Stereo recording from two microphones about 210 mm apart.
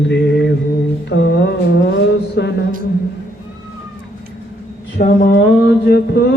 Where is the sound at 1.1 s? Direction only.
55° left (ahead or behind).